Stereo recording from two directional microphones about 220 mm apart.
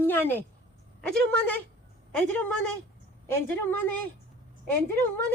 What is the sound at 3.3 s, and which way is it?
Speech, 10° left (ahead or behind).